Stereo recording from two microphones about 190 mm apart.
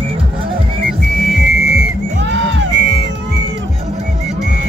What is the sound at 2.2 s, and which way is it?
Music, 80° right.